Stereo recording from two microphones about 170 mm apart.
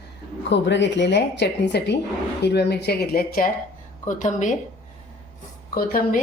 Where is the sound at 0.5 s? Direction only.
90° left; by 3.5 s 60° left (ahead or behind).